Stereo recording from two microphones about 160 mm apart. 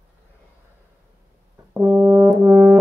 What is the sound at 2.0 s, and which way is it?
Brass instrument, 35° right (ahead or behind).